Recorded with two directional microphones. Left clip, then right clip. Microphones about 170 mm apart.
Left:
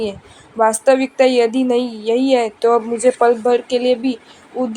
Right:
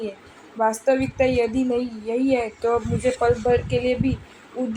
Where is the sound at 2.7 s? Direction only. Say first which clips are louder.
Left 8 dB; 35° left (ahead or behind).